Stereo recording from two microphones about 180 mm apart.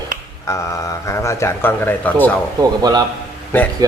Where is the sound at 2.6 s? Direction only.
20° right (ahead or behind).